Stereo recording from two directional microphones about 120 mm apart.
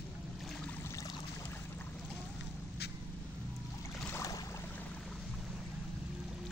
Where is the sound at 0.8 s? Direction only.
25° left (ahead or behind).